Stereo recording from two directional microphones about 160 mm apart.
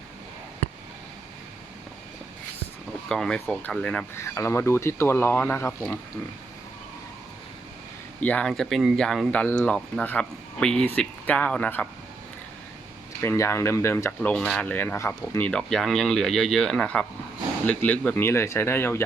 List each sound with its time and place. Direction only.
3.1 s speech: 5° left (ahead or behind)
4.2 s speech: 15° left (ahead or behind)
8.2 s speech: 10° left (ahead or behind)
13.2 s speech: 15° left (ahead or behind)
14.2 s speech: 5° left (ahead or behind)